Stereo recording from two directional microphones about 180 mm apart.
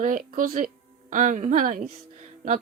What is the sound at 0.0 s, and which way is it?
A woman's voice, 50° right (ahead or behind).